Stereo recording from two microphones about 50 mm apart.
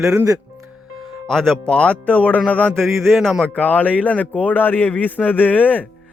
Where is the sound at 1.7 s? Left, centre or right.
Left.